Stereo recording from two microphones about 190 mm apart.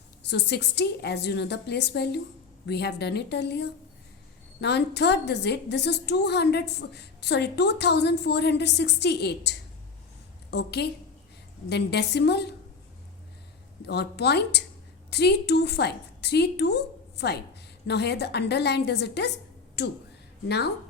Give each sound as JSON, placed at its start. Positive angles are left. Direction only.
{"t": 0.2, "sound": "a woman's voice", "side_deg": 60}
{"t": 13.8, "sound": "a woman's voice", "side_deg": 60}